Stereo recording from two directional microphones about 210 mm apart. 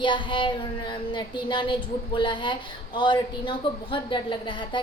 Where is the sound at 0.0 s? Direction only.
25° left (ahead or behind).